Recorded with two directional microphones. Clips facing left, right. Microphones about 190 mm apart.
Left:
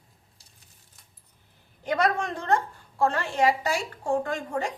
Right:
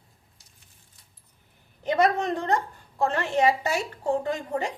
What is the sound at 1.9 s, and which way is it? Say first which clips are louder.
A woman's voice: right 3 dB; 20° right (ahead or behind).